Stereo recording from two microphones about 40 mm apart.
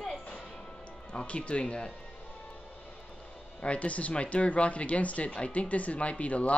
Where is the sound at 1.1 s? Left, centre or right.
Left.